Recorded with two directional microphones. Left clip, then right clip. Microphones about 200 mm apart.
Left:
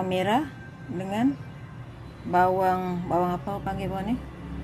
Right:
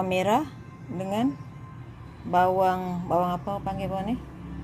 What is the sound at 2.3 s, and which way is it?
A woman's voice, 25° right (ahead or behind).